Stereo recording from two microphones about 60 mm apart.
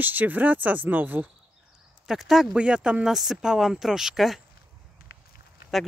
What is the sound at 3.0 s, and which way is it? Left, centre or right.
Speech, centre.